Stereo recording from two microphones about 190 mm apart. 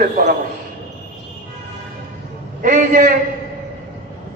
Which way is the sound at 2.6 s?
50° right (ahead or behind).